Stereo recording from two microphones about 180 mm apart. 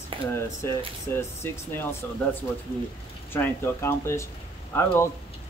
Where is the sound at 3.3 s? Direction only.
10° left (ahead or behind).